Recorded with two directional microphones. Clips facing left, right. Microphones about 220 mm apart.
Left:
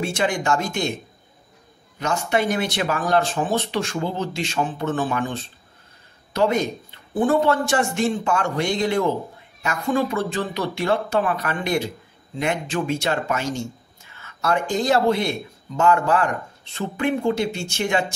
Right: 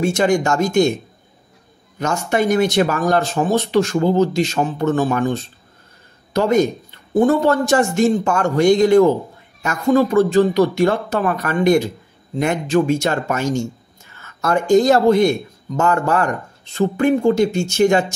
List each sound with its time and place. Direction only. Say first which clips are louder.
0.0 s speech: right 7 dB; 45° right (ahead or behind)
2.0 s speech: right 3 dB; 45° right (ahead or behind)